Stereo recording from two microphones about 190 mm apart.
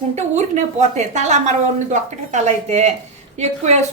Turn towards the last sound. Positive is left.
turn(degrees=-35)  # may be behind; listen again after turning